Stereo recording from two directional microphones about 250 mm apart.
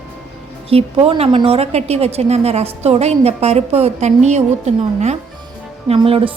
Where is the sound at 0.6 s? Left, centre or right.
Right.